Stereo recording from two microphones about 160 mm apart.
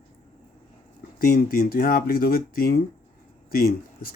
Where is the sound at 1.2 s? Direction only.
65° left (ahead or behind).